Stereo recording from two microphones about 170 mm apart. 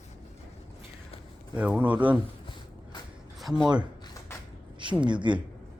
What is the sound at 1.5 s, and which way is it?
Speech, 10° right (ahead or behind).